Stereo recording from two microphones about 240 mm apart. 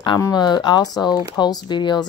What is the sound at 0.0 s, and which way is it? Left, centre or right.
A woman's voice, centre.